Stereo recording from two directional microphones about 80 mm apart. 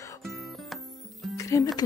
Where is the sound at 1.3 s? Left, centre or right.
Left.